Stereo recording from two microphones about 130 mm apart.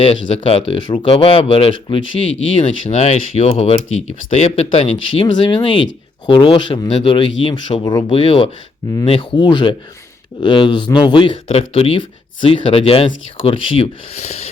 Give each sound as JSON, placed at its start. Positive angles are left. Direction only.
{"t": 0.0, "sound": "speech", "side_deg": 50}
{"t": 2.9, "sound": "speech", "side_deg": 60}
{"t": 8.0, "sound": "speech", "side_deg": 45}